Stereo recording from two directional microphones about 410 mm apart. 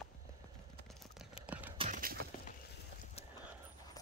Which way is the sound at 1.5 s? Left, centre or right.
Centre.